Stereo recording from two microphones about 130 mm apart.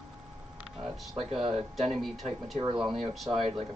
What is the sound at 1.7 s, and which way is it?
Speech, centre (ahead or behind).